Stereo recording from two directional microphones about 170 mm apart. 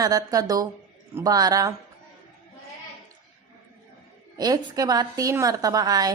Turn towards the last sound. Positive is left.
turn(degrees=-20)  # may be behind; listen again after turning